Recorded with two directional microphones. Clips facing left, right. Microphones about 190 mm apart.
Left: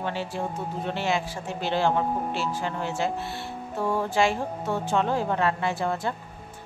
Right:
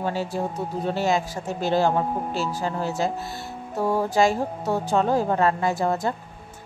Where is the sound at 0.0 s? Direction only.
40° right (ahead or behind).